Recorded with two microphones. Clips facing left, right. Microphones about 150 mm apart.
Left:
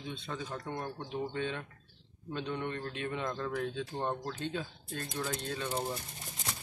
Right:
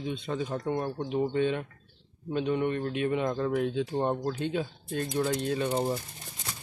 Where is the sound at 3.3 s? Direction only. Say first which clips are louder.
Right 7 dB; 25° right (ahead or behind).